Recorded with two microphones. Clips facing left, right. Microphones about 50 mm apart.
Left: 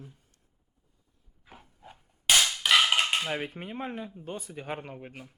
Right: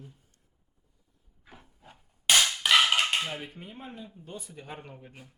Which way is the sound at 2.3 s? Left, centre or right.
Centre.